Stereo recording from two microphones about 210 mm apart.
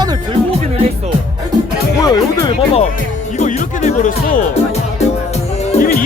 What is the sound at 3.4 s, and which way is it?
Music, 35° left (ahead or behind).